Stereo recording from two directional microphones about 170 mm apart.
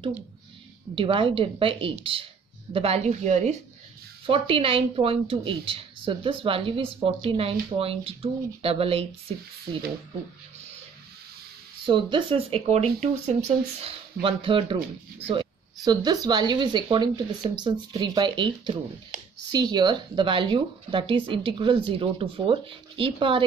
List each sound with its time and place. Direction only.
0.9 s a woman's voice: 30° right (ahead or behind)
4.3 s a woman's voice: 35° right (ahead or behind)
11.8 s a woman's voice: 30° right (ahead or behind)